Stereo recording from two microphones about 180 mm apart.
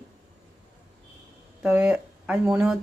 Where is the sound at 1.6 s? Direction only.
5° right (ahead or behind).